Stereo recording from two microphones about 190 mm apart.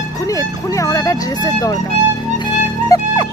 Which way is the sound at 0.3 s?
15° left (ahead or behind).